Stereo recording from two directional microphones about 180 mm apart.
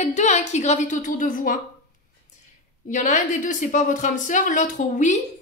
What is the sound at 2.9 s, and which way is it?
A woman's voice, 45° left (ahead or behind).